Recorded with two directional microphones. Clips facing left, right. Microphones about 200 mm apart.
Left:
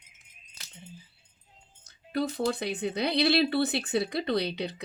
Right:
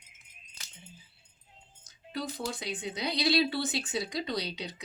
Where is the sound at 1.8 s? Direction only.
60° left (ahead or behind).